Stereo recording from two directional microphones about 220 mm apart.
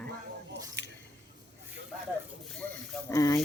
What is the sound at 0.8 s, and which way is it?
Squish, 50° right (ahead or behind).